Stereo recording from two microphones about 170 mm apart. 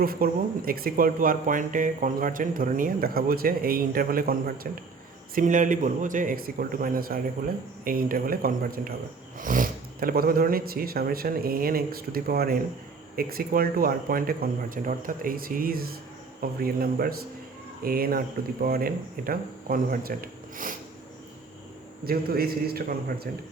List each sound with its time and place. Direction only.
0.0 s speech: 60° right (ahead or behind)
22.0 s speech: 60° right (ahead or behind)